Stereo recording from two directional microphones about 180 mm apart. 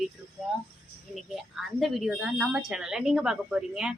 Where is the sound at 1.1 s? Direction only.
Centre (ahead or behind).